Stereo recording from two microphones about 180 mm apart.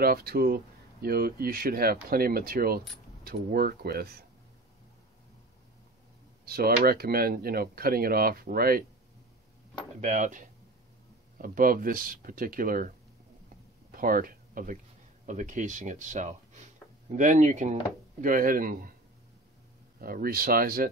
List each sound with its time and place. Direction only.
0.0 s speech: 55° right (ahead or behind)
6.4 s speech: 60° right (ahead or behind)
9.9 s speech: 40° right (ahead or behind)
13.9 s speech: 50° right (ahead or behind)
20.0 s speech: 55° right (ahead or behind)